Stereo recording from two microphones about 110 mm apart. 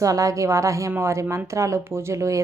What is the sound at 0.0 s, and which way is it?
A woman's voice, 30° right (ahead or behind).